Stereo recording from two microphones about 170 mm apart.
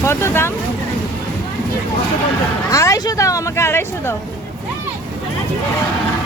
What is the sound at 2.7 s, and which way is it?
Speech, 20° left (ahead or behind).